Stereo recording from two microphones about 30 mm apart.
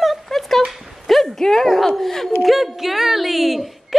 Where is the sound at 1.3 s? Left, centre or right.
Centre.